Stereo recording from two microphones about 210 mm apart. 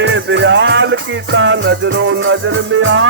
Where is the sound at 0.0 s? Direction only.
60° right (ahead or behind).